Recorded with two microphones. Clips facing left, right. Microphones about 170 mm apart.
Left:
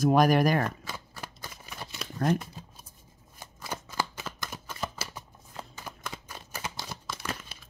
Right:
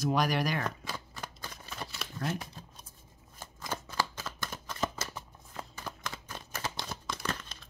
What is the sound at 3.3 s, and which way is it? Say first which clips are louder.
Shuffling cards: even; 15° left (ahead or behind).